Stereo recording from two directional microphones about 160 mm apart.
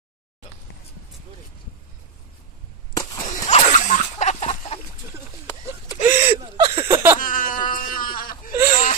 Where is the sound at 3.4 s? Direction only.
45° left (ahead or behind).